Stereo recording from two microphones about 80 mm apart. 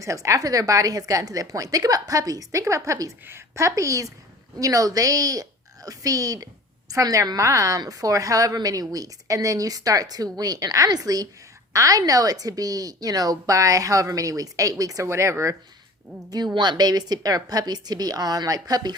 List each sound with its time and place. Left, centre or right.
0.0 s a woman's voice: right
16.6 s a woman's voice: right